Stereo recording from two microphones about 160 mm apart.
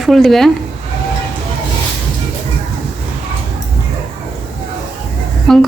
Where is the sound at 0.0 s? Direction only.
Centre (ahead or behind).